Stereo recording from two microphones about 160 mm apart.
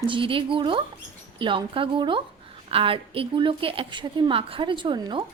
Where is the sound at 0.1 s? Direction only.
35° right (ahead or behind).